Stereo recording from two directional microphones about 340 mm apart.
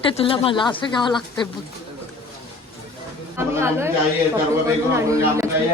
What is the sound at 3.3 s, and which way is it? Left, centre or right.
A man's voice, centre.